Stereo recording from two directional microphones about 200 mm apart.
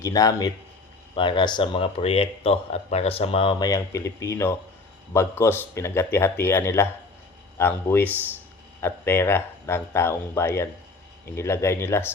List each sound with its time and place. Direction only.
0.0 s speech: 15° left (ahead or behind)